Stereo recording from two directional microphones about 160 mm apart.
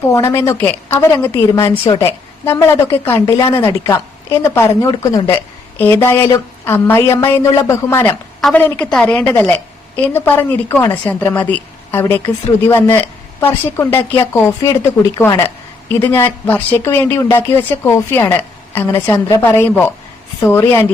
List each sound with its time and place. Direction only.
0.1 s a woman's voice: 20° left (ahead or behind)
3.2 s a woman's voice: 30° left (ahead or behind)
8.4 s a woman's voice: centre (ahead or behind)